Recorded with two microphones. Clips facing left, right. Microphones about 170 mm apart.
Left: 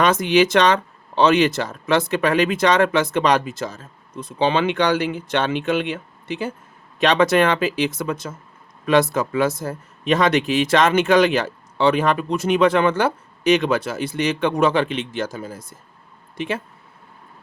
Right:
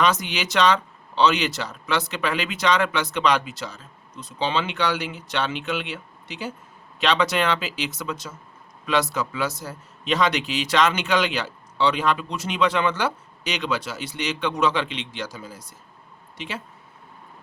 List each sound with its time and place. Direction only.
0.0 s speech: 55° left (ahead or behind)